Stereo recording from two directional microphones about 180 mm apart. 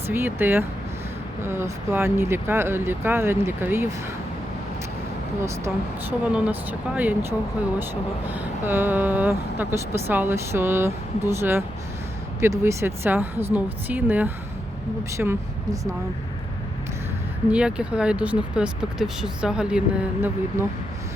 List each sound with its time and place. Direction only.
0.1 s speech: 10° right (ahead or behind)
5.4 s speech: 15° right (ahead or behind)
17.5 s speech: 5° right (ahead or behind)